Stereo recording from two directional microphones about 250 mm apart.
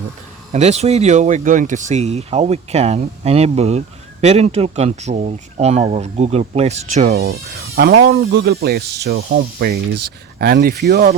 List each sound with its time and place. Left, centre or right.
0.5 s speech: right